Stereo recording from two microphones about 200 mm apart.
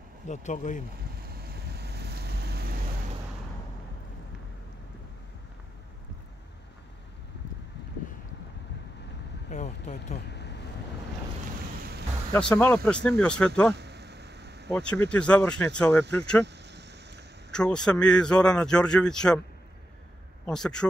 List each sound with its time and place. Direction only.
0.3 s speech: 35° left (ahead or behind)
1.2 s vehicle: 50° right (ahead or behind)
9.5 s vehicle: 35° left (ahead or behind)
10.1 s vehicle: 55° left (ahead or behind)
12.3 s speech: 10° left (ahead or behind)
13.7 s a sound: 55° right (ahead or behind)
14.7 s speech: 5° left (ahead or behind)
16.4 s vehicle: 60° right (ahead or behind)
17.5 s speech: 5° left (ahead or behind)
20.4 s speech: 5° left (ahead or behind)